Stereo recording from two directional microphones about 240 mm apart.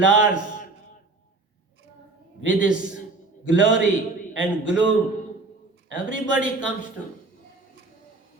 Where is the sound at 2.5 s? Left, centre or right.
Left.